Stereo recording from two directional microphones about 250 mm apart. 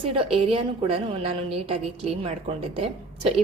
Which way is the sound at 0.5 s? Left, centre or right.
Right.